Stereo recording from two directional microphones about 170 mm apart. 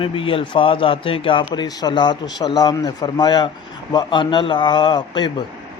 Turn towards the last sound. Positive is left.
turn(degrees=25)  # may be behind; listen again after turning